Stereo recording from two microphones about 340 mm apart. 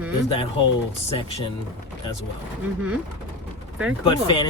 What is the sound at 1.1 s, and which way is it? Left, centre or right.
Speech, centre.